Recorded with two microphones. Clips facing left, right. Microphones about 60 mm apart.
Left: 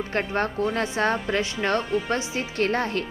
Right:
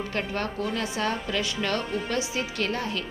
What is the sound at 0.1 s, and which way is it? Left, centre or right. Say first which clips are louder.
Speech: left 4 dB; left.